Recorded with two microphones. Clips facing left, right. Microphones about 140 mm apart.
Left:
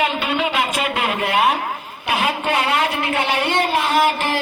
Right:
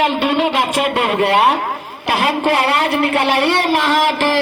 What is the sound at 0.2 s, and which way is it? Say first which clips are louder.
A man's voice: right 5 dB; 65° right (ahead or behind).